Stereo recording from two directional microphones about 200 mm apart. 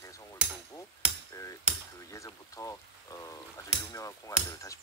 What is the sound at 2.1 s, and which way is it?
Pour, 15° left (ahead or behind).